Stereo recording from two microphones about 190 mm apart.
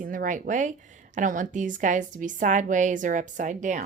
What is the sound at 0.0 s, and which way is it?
A woman's voice, 45° right (ahead or behind).